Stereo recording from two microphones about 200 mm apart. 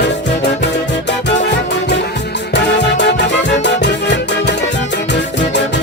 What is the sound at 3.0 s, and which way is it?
Music, 60° left (ahead or behind).